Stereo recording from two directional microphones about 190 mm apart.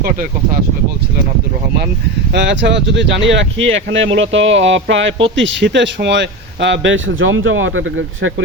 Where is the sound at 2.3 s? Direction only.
70° right (ahead or behind).